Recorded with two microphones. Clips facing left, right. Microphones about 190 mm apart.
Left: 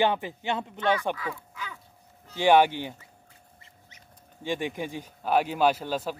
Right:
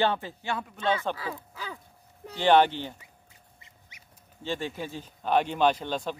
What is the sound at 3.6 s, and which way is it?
Duck, 10° right (ahead or behind).